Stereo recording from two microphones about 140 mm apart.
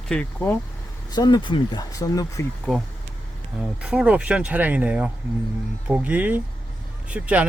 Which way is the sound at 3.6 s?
5° right (ahead or behind).